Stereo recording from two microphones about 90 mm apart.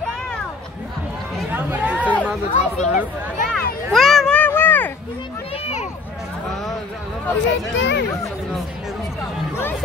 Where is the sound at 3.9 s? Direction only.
Centre (ahead or behind).